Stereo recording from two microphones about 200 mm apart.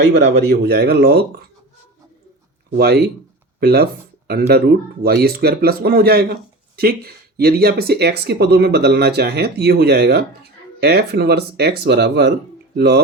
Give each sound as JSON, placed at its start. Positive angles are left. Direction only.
{"t": 0.0, "sound": "speech", "side_deg": -60}
{"t": 2.7, "sound": "speech", "side_deg": -50}